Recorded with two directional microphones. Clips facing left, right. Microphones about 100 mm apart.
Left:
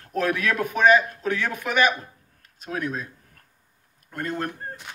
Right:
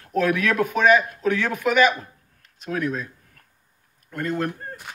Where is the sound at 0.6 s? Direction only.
20° left (ahead or behind).